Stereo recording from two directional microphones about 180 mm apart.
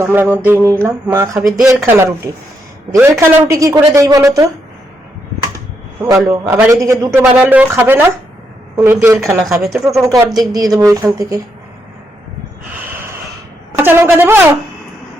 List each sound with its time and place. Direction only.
0.0 s a woman's voice: 10° right (ahead or behind)
6.1 s a woman's voice: 5° right (ahead or behind)
9.4 s speech: centre (ahead or behind)
9.9 s speech: 20° right (ahead or behind)
13.7 s a woman's voice: 15° right (ahead or behind)